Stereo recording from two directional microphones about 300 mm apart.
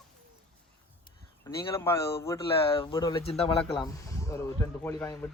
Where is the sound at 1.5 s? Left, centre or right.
Centre.